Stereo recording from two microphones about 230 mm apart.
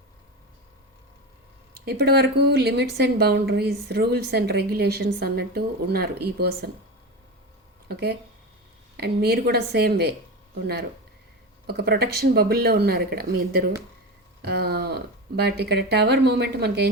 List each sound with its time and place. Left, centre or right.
1.8 s a woman's voice: right
7.9 s a woman's voice: right
11.6 s a woman's voice: right